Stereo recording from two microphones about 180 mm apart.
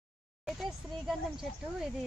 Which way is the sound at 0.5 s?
Centre (ahead or behind).